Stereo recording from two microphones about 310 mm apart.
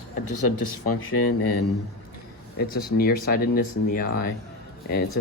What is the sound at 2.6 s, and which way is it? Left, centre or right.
Speech, left.